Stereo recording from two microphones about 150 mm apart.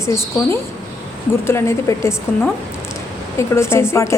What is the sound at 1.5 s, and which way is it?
Speech, 15° left (ahead or behind).